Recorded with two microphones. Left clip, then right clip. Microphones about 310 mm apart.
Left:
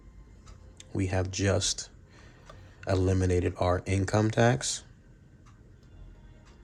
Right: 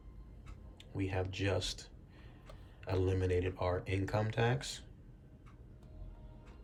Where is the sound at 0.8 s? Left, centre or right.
Centre.